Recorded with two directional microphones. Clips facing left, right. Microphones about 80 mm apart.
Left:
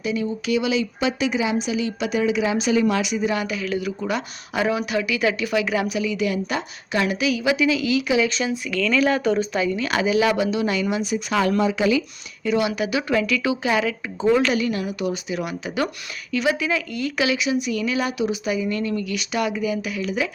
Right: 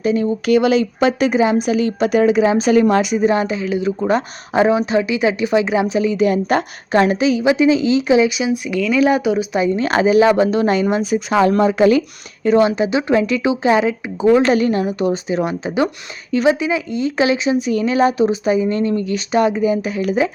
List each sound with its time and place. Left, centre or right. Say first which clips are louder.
0.0 s a woman's voice: right 7 dB; right
6.0 s a woman's voice: right 7 dB; right
8.3 s speech: right 5 dB; centre
9.6 s speech: right 6 dB; right
11.3 s speech: right 6 dB; right
11.6 s a woman's voice: right 7 dB; right; by 14.4 s centre
14.4 s speech: right 7 dB; right